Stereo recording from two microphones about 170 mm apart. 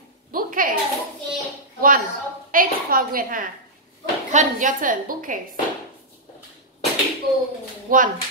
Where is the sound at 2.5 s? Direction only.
55° right (ahead or behind).